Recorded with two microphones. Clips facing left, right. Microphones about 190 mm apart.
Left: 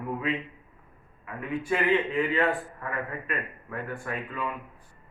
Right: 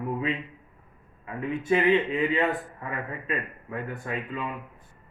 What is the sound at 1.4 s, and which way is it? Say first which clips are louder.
A man's voice: right 3 dB; 25° right (ahead or behind).